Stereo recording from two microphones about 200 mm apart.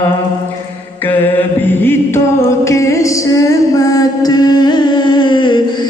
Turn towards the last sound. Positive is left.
turn(degrees=20)  # may be behind; listen again after turning